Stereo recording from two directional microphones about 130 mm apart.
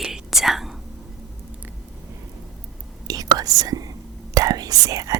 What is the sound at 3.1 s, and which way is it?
Whispering, 30° right (ahead or behind).